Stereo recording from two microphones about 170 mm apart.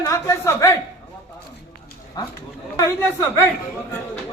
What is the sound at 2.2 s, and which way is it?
A man's voice, 20° left (ahead or behind).